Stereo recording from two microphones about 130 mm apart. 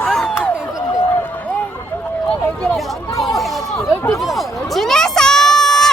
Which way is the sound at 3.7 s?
20° left (ahead or behind).